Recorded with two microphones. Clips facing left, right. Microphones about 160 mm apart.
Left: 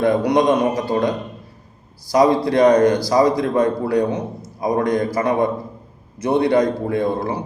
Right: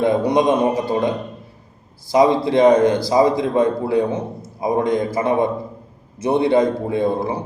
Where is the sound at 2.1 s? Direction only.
20° right (ahead or behind).